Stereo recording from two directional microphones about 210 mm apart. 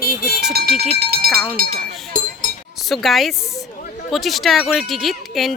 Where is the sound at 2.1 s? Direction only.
40° right (ahead or behind).